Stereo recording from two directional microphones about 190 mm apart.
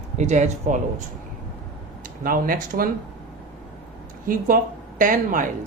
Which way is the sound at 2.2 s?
45° right (ahead or behind).